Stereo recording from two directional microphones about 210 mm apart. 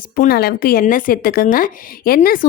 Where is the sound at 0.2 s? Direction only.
45° left (ahead or behind).